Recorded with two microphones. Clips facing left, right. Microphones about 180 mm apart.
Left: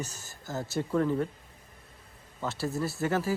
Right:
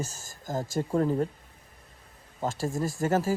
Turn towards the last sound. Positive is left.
turn(degrees=-45)  # may be behind; listen again after turning